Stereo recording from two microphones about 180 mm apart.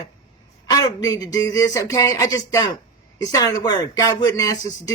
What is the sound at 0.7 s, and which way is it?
Speech, 25° left (ahead or behind).